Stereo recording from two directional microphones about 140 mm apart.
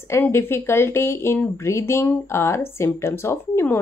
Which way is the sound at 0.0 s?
20° left (ahead or behind).